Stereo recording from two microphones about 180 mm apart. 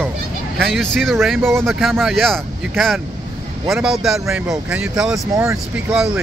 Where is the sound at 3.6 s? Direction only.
Centre (ahead or behind).